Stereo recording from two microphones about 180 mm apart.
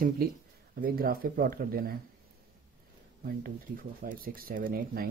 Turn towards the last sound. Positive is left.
turn(degrees=-55)  # may be behind; listen again after turning